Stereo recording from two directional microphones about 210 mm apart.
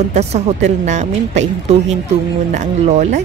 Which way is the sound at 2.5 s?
30° right (ahead or behind).